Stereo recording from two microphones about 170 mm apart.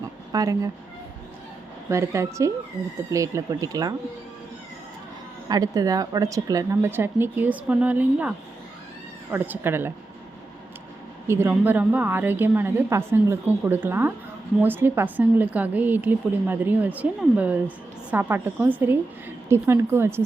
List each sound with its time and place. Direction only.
0.3 s speech: 20° right (ahead or behind)
1.9 s a woman's voice: 15° right (ahead or behind)
5.5 s a woman's voice: 20° right (ahead or behind)
9.3 s a woman's voice: 15° right (ahead or behind)
11.3 s a woman's voice: 15° right (ahead or behind)